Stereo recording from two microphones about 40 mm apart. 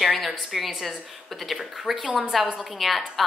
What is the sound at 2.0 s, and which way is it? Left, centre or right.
Speech, right.